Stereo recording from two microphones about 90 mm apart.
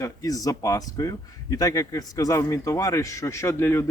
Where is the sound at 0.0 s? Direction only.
40° left (ahead or behind).